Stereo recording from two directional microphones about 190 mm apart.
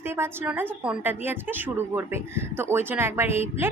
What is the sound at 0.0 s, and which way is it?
Speech, 10° right (ahead or behind).